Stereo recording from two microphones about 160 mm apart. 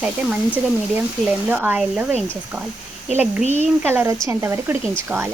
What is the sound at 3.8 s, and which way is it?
Speech, 10° right (ahead or behind).